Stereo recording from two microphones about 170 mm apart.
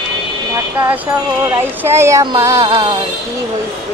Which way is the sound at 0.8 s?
10° right (ahead or behind).